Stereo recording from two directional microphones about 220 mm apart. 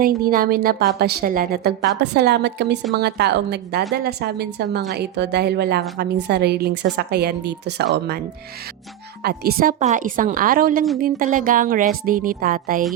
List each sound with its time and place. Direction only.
0.0 s a woman's voice: 40° right (ahead or behind)
9.2 s a woman's voice: 45° right (ahead or behind)